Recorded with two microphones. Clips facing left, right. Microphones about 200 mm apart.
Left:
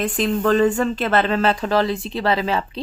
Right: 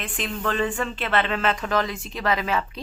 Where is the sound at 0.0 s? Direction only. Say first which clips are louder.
Left 9 dB; 40° left (ahead or behind).